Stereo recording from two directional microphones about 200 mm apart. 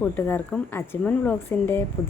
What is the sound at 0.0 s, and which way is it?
A woman's voice, 10° left (ahead or behind).